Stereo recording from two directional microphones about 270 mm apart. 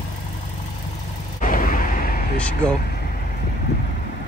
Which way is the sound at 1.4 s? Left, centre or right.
Left.